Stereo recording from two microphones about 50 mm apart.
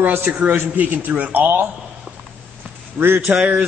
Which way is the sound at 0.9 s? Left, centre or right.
Right.